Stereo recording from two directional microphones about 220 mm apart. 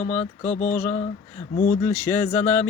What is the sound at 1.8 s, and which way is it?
Speech, 10° left (ahead or behind).